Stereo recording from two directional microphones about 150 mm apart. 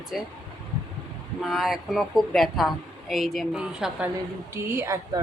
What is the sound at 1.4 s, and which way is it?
A woman's voice, centre (ahead or behind).